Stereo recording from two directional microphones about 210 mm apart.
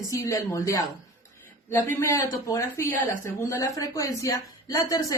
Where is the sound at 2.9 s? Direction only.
40° right (ahead or behind).